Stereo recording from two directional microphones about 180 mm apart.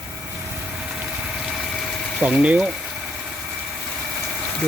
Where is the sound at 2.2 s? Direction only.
5° right (ahead or behind).